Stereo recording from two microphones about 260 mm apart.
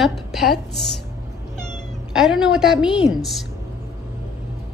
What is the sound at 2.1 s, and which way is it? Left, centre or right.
A woman's voice, centre.